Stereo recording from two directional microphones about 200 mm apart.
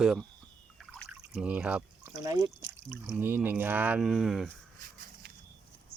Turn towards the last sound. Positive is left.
turn(degrees=0)  # may be behind; listen again after turning